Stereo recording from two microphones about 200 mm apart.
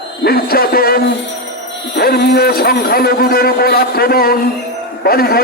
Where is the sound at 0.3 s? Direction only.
50° left (ahead or behind).